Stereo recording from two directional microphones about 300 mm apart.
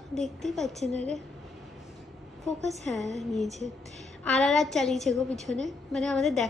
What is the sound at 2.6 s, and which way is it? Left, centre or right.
A woman's voice, centre.